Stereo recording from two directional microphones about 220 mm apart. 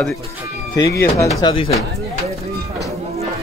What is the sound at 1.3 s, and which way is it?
Speech, 20° left (ahead or behind).